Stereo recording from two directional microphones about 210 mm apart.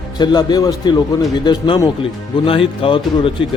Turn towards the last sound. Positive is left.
turn(degrees=25)  # may be behind; listen again after turning